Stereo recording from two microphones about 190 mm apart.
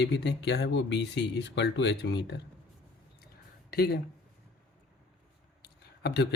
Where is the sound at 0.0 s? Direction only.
65° left (ahead or behind).